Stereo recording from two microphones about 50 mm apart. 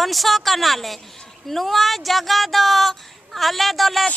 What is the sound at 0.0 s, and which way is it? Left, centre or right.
Speech, centre.